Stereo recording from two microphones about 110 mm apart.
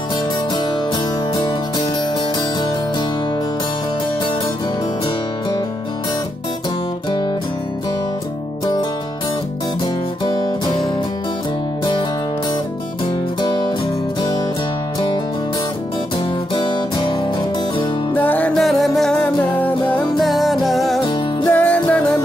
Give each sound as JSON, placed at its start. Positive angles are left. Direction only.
{"t": 1.3, "sound": "music", "side_deg": 45}
{"t": 16.5, "sound": "music", "side_deg": 45}
{"t": 18.1, "sound": "music", "side_deg": 15}
{"t": 18.5, "sound": "music", "side_deg": 0}
{"t": 20.2, "sound": "music", "side_deg": 0}
{"t": 21.5, "sound": "music", "side_deg": 15}